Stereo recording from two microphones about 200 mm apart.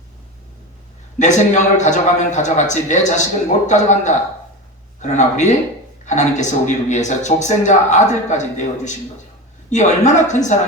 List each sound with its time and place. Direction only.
1.2 s speech: 35° left (ahead or behind)